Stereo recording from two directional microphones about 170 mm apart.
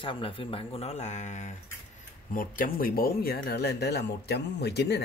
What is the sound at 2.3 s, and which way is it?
Speech, 55° left (ahead or behind).